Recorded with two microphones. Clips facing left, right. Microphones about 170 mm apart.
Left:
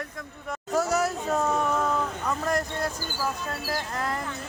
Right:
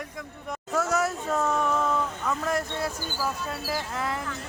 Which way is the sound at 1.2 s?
20° left (ahead or behind).